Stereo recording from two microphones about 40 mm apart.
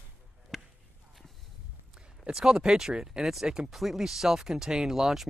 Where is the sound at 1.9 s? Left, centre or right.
Right.